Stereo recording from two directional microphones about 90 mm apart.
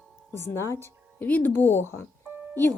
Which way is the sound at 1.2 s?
20° left (ahead or behind).